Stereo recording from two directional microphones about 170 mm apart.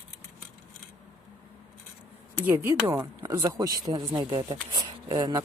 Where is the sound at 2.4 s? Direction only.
15° right (ahead or behind).